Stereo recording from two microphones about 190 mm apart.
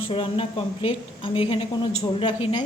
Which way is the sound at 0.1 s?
30° left (ahead or behind).